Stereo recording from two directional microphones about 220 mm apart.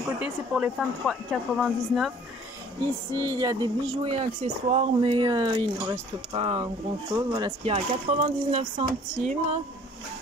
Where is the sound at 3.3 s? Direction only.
15° right (ahead or behind).